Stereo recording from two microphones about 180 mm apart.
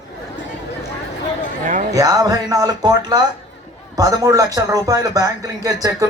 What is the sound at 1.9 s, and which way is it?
Speech, 20° right (ahead or behind).